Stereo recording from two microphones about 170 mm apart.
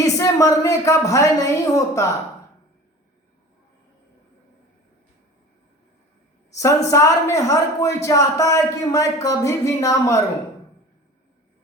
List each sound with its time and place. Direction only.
0.0 s a man's voice: 20° left (ahead or behind)
6.6 s a man's voice: 20° left (ahead or behind)